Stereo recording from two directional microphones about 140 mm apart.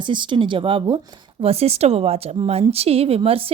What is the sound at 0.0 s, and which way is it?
Speech, 35° right (ahead or behind).